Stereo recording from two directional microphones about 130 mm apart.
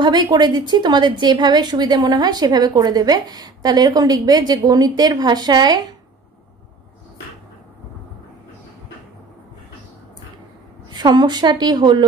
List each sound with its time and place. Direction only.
0.0 s a woman's voice: 35° right (ahead or behind)
10.9 s a woman's voice: 35° right (ahead or behind)